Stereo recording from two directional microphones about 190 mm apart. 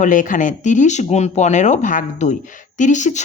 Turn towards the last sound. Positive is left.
turn(degrees=40)  # may be behind; listen again after turning